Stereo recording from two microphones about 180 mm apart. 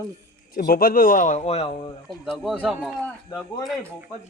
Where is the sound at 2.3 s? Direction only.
Centre (ahead or behind).